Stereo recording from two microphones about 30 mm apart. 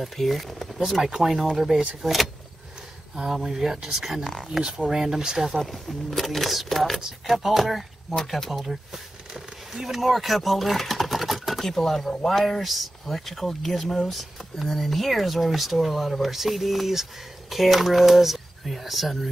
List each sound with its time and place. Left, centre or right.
0.0 s speech: centre
4.4 s speech: right
5.6 s speech: centre
11.6 s speech: centre
12.6 s speech: centre